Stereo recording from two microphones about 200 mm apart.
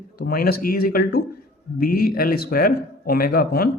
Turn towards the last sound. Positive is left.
turn(degrees=50)  # may be behind; listen again after turning